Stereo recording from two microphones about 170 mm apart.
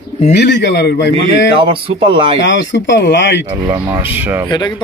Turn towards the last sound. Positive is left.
turn(degrees=25)  # may be behind; listen again after turning